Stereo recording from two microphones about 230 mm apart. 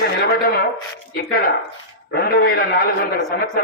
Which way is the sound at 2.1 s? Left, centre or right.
Left.